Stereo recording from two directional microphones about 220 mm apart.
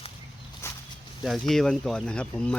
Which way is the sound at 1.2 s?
Centre (ahead or behind).